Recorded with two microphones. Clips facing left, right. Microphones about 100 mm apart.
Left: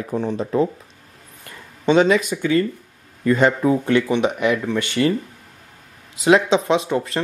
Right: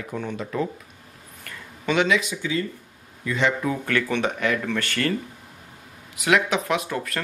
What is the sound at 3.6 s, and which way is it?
Speech, 25° left (ahead or behind).